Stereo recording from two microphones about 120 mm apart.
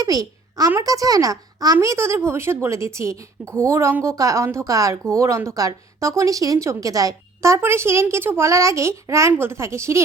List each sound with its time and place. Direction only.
0.0 s a woman's voice: 30° right (ahead or behind)